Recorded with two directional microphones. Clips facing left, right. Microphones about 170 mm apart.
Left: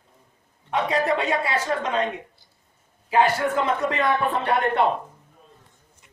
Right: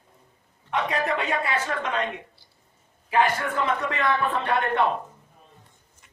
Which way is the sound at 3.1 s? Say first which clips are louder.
Left 3 dB; 30° left (ahead or behind).